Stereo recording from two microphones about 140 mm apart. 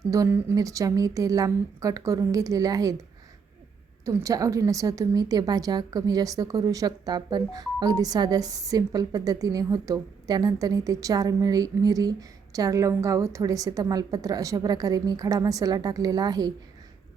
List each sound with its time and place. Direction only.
0.0 s a woman's voice: 25° right (ahead or behind)
4.0 s a woman's voice: 25° right (ahead or behind)